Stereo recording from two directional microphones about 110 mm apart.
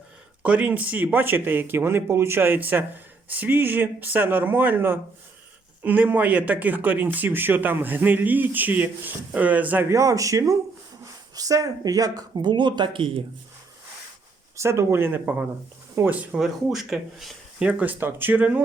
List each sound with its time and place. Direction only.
0.4 s speech: 15° right (ahead or behind)
9.9 s speech: 30° right (ahead or behind); by 13.2 s 50° right (ahead or behind)
14.5 s speech: 25° right (ahead or behind); by 17.7 s centre (ahead or behind)
17.7 s speech: 15° right (ahead or behind)